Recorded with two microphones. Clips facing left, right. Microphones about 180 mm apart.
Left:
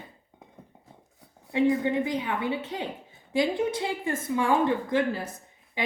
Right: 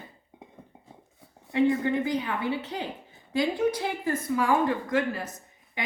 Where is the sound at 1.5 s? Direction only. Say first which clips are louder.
Even; 20° left (ahead or behind).